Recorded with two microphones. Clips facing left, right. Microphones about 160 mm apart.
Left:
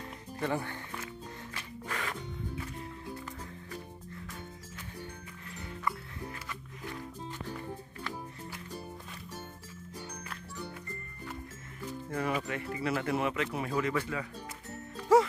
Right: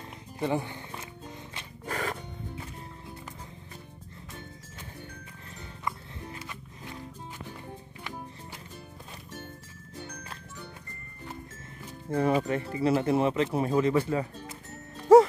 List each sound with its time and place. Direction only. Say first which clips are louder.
0.4 s music: right 4 dB; 20° right (ahead or behind)
1.9 s music: right 6 dB; 40° right (ahead or behind)
5.9 s music: right 1 dB; 20° right (ahead or behind)
12.1 s speech: right 8 dB; 30° right (ahead or behind)